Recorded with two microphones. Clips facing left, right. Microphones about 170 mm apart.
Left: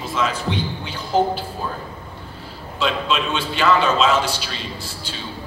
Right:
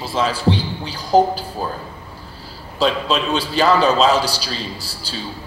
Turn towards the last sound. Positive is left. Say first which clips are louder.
# right 2 dB
turn(degrees=-35)  # may be behind; listen again after turning